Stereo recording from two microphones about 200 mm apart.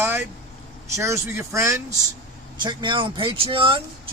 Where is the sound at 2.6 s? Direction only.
25° right (ahead or behind).